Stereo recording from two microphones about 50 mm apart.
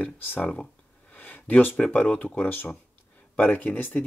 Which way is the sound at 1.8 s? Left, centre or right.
Left.